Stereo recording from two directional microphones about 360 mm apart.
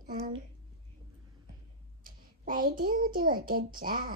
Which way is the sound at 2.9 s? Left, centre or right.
Right.